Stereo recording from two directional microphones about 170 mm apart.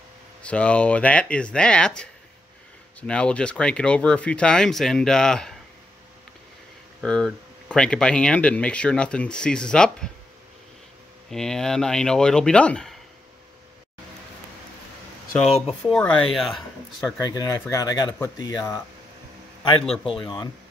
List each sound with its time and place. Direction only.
0.4 s speech: 5° left (ahead or behind)
7.0 s speech: 5° left (ahead or behind)
11.2 s speech: 5° left (ahead or behind)
15.6 s speech: centre (ahead or behind)
17.2 s speech: 20° left (ahead or behind)
20.2 s speech: 25° left (ahead or behind)